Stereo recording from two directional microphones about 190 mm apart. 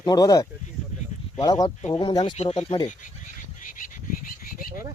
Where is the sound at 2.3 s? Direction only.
35° left (ahead or behind).